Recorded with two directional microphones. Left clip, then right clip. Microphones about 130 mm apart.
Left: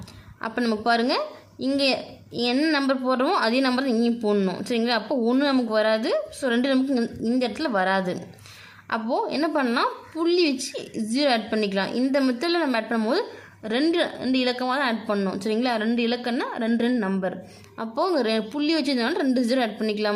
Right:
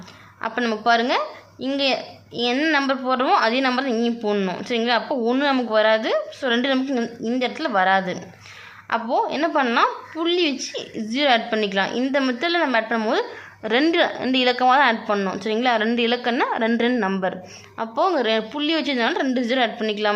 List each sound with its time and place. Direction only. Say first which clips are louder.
0.4 s a woman's voice: right 3 dB; 35° left (ahead or behind)
7.3 s a woman's voice: right 4 dB; 35° left (ahead or behind)
9.2 s a woman's voice: right 3 dB; 30° left (ahead or behind)
13.6 s a woman's voice: right 5 dB; 10° left (ahead or behind)
17.7 s a woman's voice: right 3 dB; 30° left (ahead or behind)